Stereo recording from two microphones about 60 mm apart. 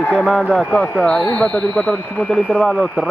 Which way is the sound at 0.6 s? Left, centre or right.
Centre.